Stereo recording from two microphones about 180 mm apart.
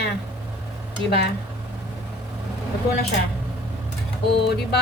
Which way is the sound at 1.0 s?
30° right (ahead or behind).